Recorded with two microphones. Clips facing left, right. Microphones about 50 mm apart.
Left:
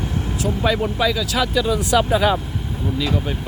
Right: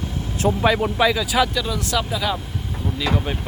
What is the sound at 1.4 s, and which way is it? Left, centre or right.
Speech, centre.